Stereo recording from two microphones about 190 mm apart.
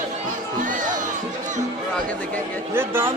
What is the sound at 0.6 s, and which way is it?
Music, 40° right (ahead or behind).